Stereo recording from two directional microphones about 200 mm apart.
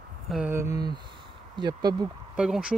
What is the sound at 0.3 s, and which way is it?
Speech, 10° right (ahead or behind).